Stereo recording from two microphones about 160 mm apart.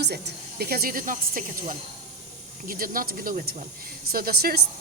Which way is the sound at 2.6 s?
60° right (ahead or behind).